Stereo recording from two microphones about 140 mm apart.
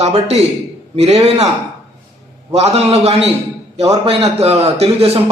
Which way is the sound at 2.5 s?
50° right (ahead or behind).